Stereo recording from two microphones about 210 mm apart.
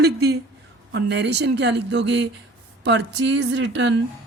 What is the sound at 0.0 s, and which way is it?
A woman's voice, 50° right (ahead or behind).